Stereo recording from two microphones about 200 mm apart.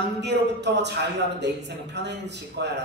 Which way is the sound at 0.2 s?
60° right (ahead or behind).